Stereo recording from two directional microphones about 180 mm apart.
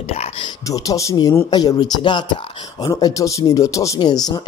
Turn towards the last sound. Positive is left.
turn(degrees=20)  # may be behind; listen again after turning